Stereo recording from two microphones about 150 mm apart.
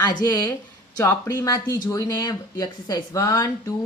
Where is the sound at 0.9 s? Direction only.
15° left (ahead or behind).